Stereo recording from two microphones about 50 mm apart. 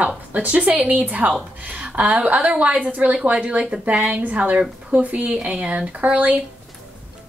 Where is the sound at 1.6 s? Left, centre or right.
Right.